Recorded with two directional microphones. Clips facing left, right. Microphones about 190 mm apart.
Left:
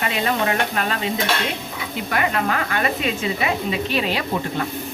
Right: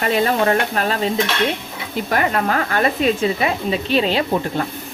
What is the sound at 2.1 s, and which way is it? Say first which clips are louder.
Speech: right 3 dB; 40° right (ahead or behind).